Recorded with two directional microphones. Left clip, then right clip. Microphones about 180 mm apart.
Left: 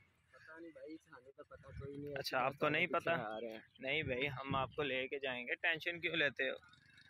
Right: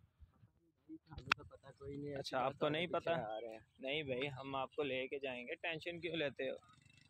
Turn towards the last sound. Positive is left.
turn(degrees=-5)  # may be behind; listen again after turning